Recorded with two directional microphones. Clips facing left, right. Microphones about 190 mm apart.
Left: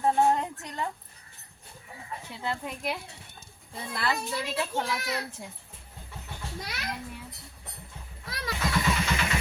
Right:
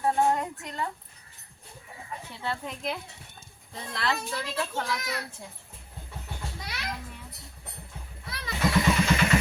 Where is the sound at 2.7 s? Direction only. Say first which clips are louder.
Even; 5° left (ahead or behind).